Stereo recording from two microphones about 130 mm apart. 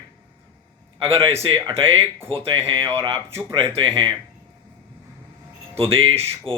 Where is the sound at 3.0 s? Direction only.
50° right (ahead or behind).